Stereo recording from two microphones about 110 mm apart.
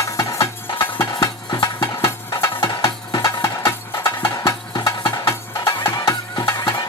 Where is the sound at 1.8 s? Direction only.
25° left (ahead or behind).